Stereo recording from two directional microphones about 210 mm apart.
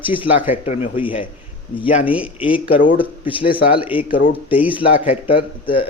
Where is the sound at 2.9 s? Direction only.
25° left (ahead or behind).